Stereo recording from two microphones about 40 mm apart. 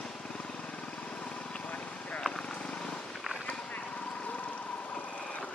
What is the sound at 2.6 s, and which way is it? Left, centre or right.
Purr, left.